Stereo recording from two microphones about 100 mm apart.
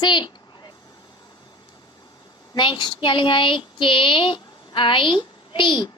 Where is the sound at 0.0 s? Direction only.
50° left (ahead or behind).